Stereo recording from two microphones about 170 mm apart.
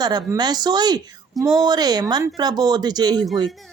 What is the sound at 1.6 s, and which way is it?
Speech, 25° right (ahead or behind).